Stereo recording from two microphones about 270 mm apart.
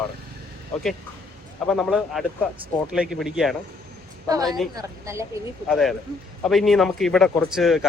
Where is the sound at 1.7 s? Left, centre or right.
Centre.